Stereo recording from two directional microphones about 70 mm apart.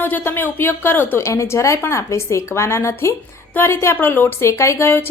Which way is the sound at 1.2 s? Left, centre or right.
Left.